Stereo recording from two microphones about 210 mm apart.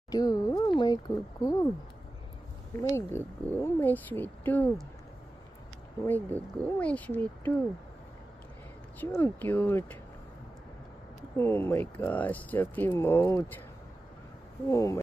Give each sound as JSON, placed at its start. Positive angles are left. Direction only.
{"t": 0.1, "sound": "speech", "side_deg": 15}
{"t": 2.8, "sound": "speech", "side_deg": 10}
{"t": 6.0, "sound": "speech", "side_deg": 10}
{"t": 9.0, "sound": "speech", "side_deg": 10}
{"t": 11.3, "sound": "speech", "side_deg": 10}
{"t": 14.7, "sound": "speech", "side_deg": 15}